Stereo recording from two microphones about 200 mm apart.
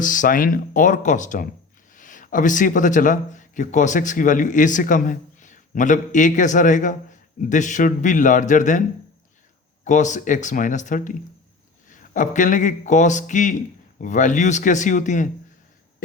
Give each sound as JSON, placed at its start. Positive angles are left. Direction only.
{"t": 0.0, "sound": "a man's voice", "side_deg": 40}
{"t": 9.8, "sound": "a man's voice", "side_deg": 40}